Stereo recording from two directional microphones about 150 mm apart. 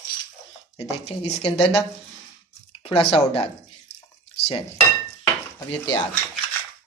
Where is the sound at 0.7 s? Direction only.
45° left (ahead or behind).